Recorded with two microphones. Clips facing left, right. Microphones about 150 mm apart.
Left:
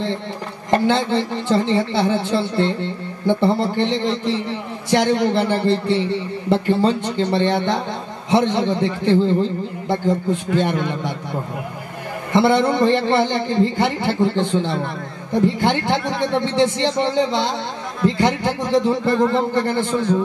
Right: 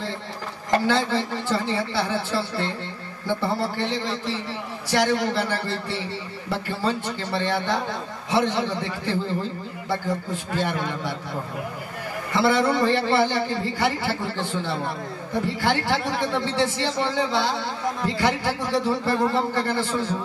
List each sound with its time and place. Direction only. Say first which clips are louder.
0.8 s speech: left 4 dB; 20° left (ahead or behind)
12.3 s speech: left 5 dB; 20° left (ahead or behind)